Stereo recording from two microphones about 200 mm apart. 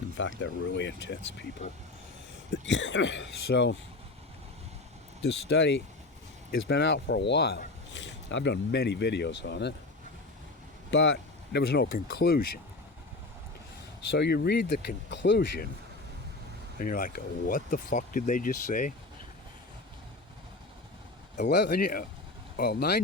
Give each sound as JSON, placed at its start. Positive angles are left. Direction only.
{"t": 0.2, "sound": "speech", "side_deg": 65}
{"t": 2.5, "sound": "speech", "side_deg": 65}
{"t": 5.2, "sound": "speech", "side_deg": 65}
{"t": 10.9, "sound": "speech", "side_deg": 60}
{"t": 14.1, "sound": "speech", "side_deg": 55}
{"t": 16.7, "sound": "speech", "side_deg": 45}
{"t": 21.4, "sound": "speech", "side_deg": 55}